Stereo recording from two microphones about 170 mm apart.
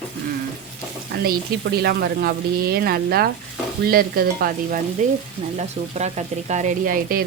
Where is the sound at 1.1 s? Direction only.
65° right (ahead or behind).